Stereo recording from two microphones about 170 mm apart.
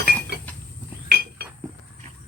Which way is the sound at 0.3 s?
75° right (ahead or behind).